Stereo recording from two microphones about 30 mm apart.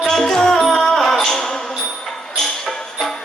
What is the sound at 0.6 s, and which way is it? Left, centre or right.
Music, centre.